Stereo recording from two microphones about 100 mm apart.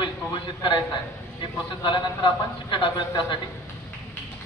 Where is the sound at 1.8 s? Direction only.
55° left (ahead or behind).